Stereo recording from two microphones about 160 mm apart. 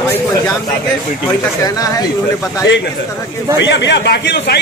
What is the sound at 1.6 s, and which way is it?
Speech, 20° left (ahead or behind).